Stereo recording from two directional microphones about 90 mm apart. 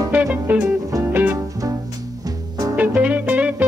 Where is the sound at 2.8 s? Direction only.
15° right (ahead or behind).